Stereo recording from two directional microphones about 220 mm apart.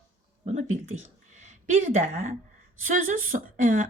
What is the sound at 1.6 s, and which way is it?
Speech, 35° right (ahead or behind).